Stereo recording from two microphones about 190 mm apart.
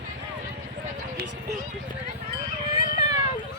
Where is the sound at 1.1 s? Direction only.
60° right (ahead or behind).